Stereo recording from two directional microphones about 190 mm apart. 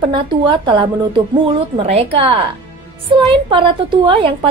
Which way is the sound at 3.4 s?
25° right (ahead or behind).